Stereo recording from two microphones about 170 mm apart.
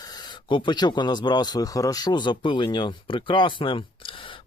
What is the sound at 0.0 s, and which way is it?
Speech, 25° left (ahead or behind).